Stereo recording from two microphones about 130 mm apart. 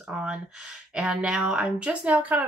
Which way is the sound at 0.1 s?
5° right (ahead or behind).